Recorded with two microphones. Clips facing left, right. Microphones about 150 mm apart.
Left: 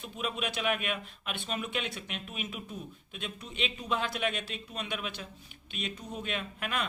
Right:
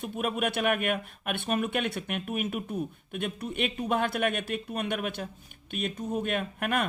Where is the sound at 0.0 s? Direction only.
55° right (ahead or behind).